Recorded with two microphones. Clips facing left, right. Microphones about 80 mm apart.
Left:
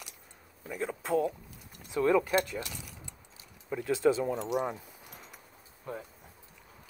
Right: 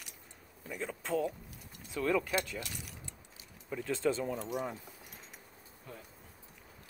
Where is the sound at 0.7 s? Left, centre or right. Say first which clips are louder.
Left 5 dB; centre.